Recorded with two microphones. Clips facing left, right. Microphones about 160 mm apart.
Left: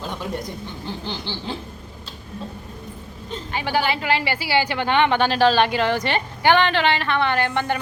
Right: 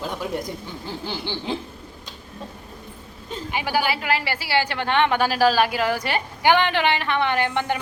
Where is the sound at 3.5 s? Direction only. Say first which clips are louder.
Left 1 dB; 10° right (ahead or behind).